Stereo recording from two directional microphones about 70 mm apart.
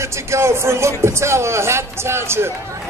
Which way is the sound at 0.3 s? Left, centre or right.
Right.